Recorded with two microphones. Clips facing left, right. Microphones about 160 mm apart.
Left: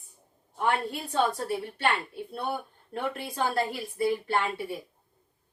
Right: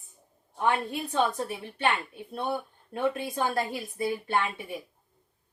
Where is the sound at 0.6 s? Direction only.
20° right (ahead or behind).